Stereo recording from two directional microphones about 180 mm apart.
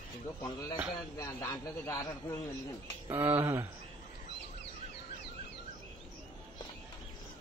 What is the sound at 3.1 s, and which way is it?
Speech, 10° right (ahead or behind).